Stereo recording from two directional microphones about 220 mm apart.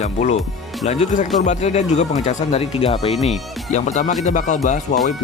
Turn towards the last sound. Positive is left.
turn(degrees=35)  # may be behind; listen again after turning